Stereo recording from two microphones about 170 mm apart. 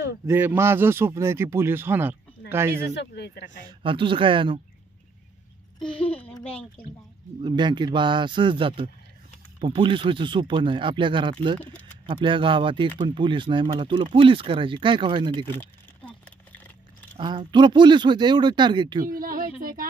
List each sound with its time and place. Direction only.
0.3 s speech: 10° right (ahead or behind)
2.9 s speech: 80° left
3.6 s speech: 30° right (ahead or behind)
6.1 s a child's voice: 10° left (ahead or behind)
7.4 s speech: 25° right (ahead or behind)
17.2 s speech: 25° right (ahead or behind)
19.0 s a woman's voice: 55° right (ahead or behind)